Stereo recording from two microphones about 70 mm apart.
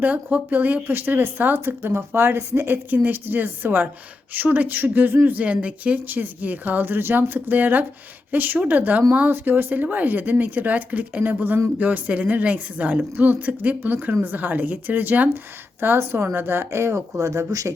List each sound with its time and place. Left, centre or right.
0.0 s speech: right